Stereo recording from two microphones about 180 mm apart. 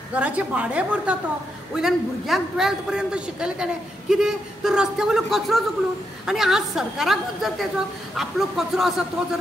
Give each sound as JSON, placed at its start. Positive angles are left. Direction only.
{"t": 0.1, "sound": "a woman's voice", "side_deg": -10}